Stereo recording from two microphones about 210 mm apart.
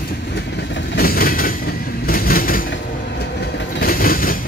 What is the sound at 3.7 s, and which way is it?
Train, 45° left (ahead or behind).